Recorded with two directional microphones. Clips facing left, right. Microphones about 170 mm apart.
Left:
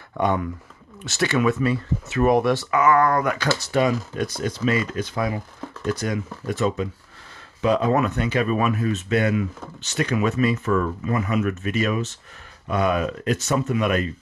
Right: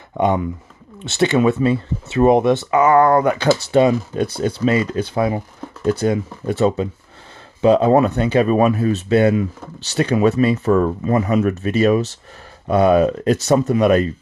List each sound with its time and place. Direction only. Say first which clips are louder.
0.2 s speech: right 5 dB; 20° right (ahead or behind)